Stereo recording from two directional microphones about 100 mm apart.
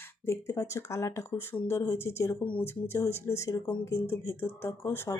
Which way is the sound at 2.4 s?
15° left (ahead or behind).